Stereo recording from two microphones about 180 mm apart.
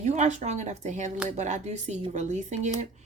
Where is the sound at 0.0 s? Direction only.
40° right (ahead or behind).